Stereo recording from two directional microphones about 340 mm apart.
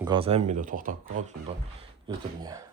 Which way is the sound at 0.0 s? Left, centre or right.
Centre.